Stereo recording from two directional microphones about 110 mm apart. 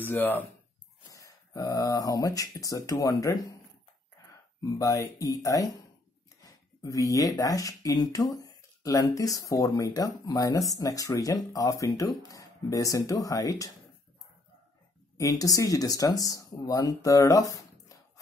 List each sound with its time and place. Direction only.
0.0 s speech: 15° left (ahead or behind)
1.1 s speech: 30° left (ahead or behind)
4.6 s speech: 35° left (ahead or behind)
15.1 s speech: 30° left (ahead or behind)